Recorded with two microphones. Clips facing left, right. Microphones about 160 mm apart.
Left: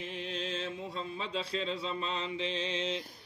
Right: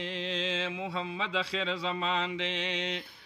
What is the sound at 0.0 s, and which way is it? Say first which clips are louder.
Mantra: right 4 dB; 90° right.